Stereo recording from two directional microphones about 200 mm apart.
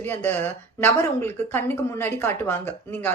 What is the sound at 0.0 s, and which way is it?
Speech, 10° left (ahead or behind).